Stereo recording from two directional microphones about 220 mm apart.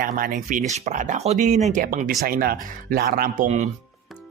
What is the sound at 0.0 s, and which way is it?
Speech, 35° right (ahead or behind).